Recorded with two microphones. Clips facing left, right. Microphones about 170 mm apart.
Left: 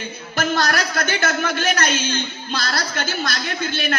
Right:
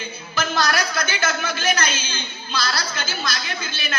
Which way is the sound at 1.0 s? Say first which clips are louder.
Left 3 dB; 60° left (ahead or behind).